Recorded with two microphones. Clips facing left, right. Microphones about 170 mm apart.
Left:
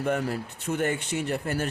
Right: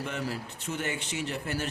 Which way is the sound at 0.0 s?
55° left (ahead or behind).